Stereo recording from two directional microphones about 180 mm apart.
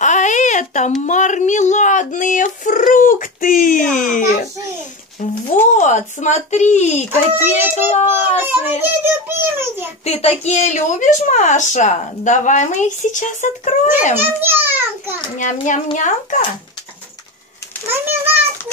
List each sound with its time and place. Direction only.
0.0 s baby cry: 40° left (ahead or behind)
1.0 s a sound: 45° left (ahead or behind)
7.1 s a child's voice: 10° right (ahead or behind)
8.4 s child singing: 10° right (ahead or behind)
10.0 s a woman's voice: 35° left (ahead or behind)
14.4 s a child's voice: 10° right (ahead or behind)
15.3 s a woman's voice: 45° left (ahead or behind)
17.9 s a child's voice: 10° right (ahead or behind)